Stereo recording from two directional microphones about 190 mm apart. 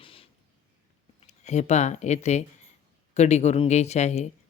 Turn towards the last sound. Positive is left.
turn(degrees=35)  # may be behind; listen again after turning